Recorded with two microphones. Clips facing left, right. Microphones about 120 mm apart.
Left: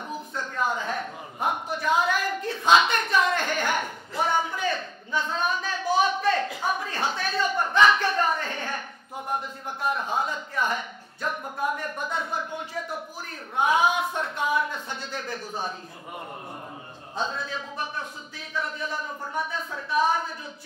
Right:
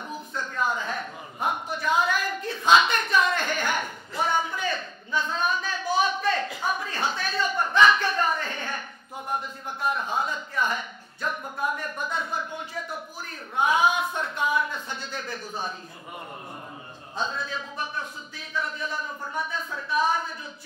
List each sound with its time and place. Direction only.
0.6 s a sound: 55° left (ahead or behind)
10.7 s speech: 55° left (ahead or behind)
17.1 s speech: 55° left (ahead or behind)